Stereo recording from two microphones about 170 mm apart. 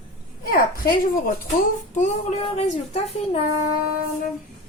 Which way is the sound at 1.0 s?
55° left (ahead or behind).